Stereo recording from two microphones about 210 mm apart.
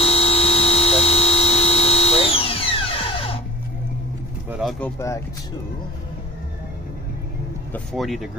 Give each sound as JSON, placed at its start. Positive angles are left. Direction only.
{"t": 0.0, "sound": "a sound", "side_deg": 25}
{"t": 4.5, "sound": "speech", "side_deg": 0}
{"t": 7.7, "sound": "speech", "side_deg": 0}